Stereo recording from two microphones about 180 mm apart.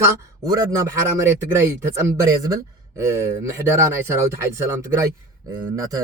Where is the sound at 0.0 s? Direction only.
20° right (ahead or behind).